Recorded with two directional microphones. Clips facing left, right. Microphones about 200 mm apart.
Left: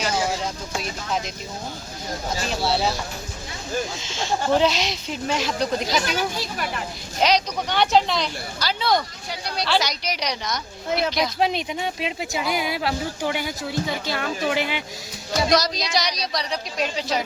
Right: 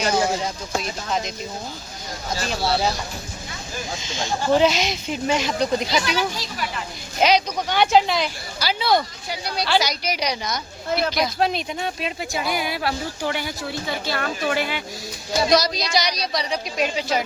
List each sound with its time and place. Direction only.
2.5 s speech: centre (ahead or behind)
4.0 s speech: centre (ahead or behind)
6.1 s speech: 50° left (ahead or behind)
7.2 s speech: 5° right (ahead or behind)
11.3 s speech: 10° left (ahead or behind)
15.3 s speech: centre (ahead or behind)